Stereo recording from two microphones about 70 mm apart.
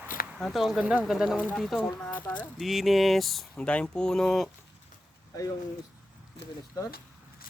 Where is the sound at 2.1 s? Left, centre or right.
Left.